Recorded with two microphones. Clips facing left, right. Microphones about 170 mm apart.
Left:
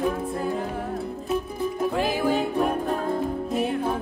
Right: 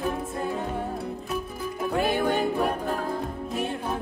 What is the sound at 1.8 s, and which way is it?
Music, centre (ahead or behind).